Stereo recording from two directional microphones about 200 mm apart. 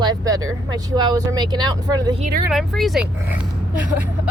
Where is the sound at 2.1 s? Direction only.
45° right (ahead or behind).